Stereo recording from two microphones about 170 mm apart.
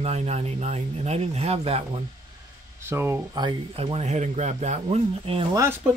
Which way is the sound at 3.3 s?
30° right (ahead or behind).